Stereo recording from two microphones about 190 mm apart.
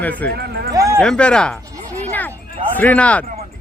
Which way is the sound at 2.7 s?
10° left (ahead or behind).